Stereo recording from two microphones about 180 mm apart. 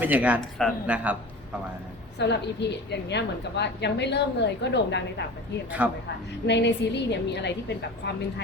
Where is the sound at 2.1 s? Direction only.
70° left (ahead or behind).